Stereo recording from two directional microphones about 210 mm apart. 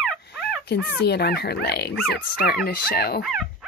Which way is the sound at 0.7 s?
50° left (ahead or behind).